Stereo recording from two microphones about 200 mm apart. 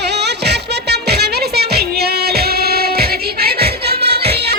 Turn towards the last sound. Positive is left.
turn(degrees=-55)  # may be behind; listen again after turning